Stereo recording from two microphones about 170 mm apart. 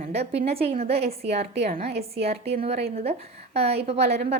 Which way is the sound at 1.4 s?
65° right (ahead or behind).